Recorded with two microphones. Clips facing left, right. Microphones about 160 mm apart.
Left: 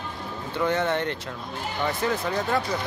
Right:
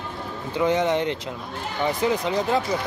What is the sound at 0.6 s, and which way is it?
Speech, 15° right (ahead or behind).